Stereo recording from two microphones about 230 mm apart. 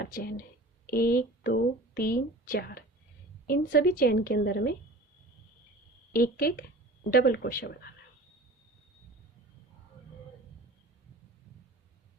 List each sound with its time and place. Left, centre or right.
0.0 s a woman's voice: left
6.1 s a woman's voice: left